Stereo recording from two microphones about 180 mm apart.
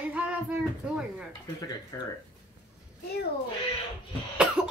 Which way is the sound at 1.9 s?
20° left (ahead or behind).